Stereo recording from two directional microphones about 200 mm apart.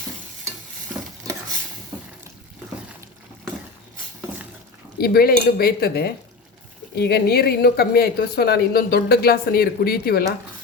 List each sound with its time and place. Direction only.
4.9 s a woman's voice: 50° left (ahead or behind)